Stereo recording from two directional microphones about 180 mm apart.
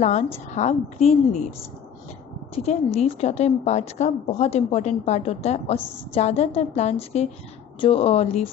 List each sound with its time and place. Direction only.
0.0 s a woman's voice: 35° left (ahead or behind)
2.5 s a woman's voice: 35° left (ahead or behind)